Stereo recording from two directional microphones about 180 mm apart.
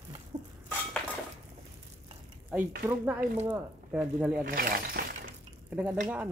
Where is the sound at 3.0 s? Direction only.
10° right (ahead or behind).